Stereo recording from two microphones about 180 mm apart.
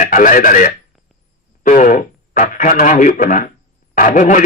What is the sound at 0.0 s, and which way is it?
A man's voice, 45° left (ahead or behind).